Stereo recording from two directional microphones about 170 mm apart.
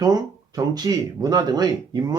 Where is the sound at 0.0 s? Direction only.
25° right (ahead or behind).